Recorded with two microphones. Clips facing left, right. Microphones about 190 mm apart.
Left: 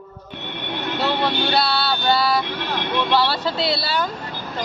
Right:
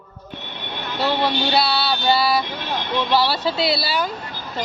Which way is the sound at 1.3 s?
55° left (ahead or behind).